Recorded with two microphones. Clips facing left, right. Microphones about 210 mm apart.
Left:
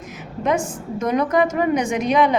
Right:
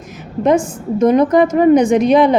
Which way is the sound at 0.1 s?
35° right (ahead or behind).